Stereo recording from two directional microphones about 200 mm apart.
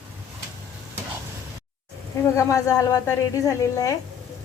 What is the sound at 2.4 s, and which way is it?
A woman's voice, 15° left (ahead or behind).